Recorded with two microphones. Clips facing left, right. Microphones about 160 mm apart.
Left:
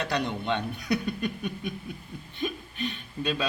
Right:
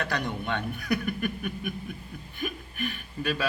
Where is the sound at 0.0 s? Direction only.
20° left (ahead or behind).